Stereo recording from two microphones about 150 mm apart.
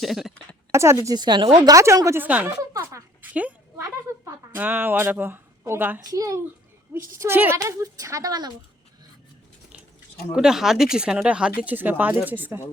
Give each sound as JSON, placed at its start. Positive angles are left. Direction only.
{"t": 0.0, "sound": "a woman's voice", "side_deg": 0}
{"t": 0.7, "sound": "a woman's voice", "side_deg": -20}
{"t": 1.7, "sound": "a woman's voice", "side_deg": -20}
{"t": 4.5, "sound": "a woman's voice", "side_deg": -15}
{"t": 6.0, "sound": "a woman's voice", "side_deg": -25}
{"t": 10.3, "sound": "a woman's voice", "side_deg": -5}